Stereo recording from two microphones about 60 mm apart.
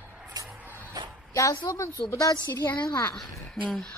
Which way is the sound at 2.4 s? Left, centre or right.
Left.